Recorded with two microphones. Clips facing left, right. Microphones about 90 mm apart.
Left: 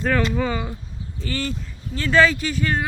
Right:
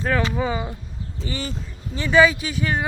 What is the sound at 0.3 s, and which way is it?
Speech, 15° right (ahead or behind).